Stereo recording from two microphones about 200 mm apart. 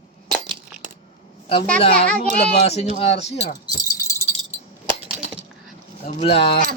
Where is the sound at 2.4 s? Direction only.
30° left (ahead or behind).